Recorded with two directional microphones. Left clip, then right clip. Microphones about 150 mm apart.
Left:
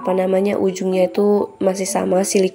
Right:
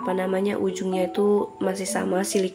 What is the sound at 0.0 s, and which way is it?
Speech, 30° left (ahead or behind).